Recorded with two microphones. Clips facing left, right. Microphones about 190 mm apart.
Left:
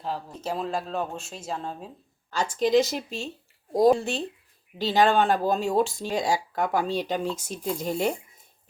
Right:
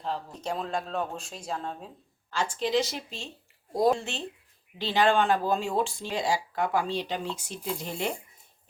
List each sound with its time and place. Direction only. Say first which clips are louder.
0.0 s speech: left 1 dB; 5° left (ahead or behind)
2.3 s speech: left 5 dB; 40° left (ahead or behind)